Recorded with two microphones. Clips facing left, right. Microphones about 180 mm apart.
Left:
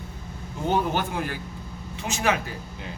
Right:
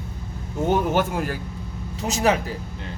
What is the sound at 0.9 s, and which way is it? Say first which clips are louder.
Speech: right 5 dB; 45° right (ahead or behind).